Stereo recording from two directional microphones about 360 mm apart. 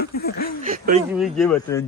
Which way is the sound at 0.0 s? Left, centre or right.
Left.